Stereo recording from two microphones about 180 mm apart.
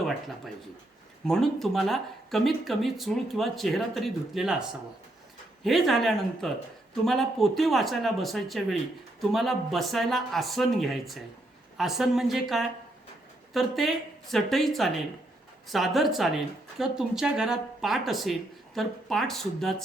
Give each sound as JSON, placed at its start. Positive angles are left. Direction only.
{"t": 1.3, "sound": "speech", "side_deg": 0}